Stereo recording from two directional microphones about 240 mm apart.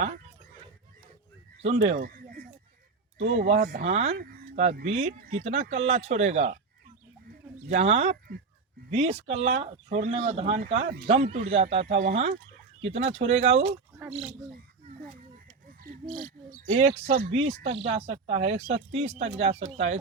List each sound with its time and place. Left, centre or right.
1.9 s a sound: right
3.2 s speech: right
7.7 s speech: right
15.8 s speech: right